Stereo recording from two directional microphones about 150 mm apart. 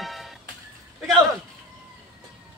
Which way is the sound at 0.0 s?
Centre (ahead or behind).